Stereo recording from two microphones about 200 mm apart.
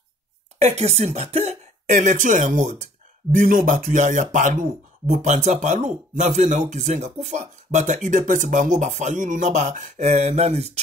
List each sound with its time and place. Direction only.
0.6 s speech: 30° right (ahead or behind)